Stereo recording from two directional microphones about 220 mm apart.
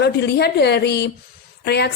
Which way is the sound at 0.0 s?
50° left (ahead or behind).